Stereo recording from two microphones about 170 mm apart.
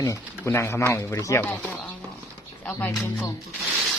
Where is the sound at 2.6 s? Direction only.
10° left (ahead or behind).